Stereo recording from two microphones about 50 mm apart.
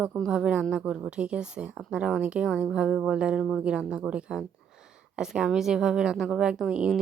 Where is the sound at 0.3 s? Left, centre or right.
Centre.